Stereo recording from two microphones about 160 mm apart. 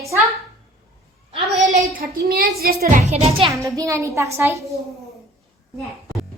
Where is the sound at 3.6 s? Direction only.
20° right (ahead or behind).